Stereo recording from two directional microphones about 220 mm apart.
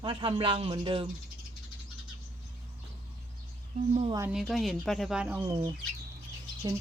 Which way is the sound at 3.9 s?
30° right (ahead or behind).